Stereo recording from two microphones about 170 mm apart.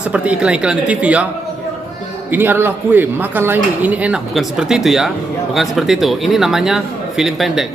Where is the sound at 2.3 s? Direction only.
10° right (ahead or behind).